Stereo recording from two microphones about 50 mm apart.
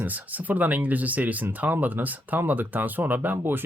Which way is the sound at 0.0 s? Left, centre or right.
Right.